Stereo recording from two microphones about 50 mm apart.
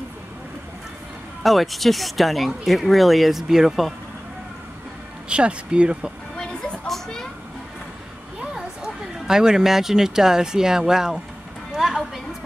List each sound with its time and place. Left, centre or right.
1.4 s speech: centre
5.3 s speech: right
6.9 s vehicle: centre
8.4 s speech: centre
11.7 s a sound: centre